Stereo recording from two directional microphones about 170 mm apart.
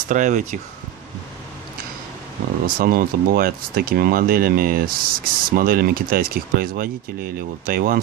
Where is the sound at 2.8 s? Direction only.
60° right (ahead or behind).